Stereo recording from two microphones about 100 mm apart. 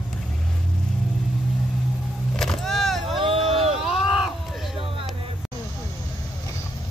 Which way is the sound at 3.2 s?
65° right (ahead or behind).